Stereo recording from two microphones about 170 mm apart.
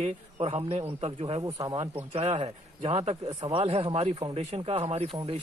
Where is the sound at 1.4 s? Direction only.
20° right (ahead or behind).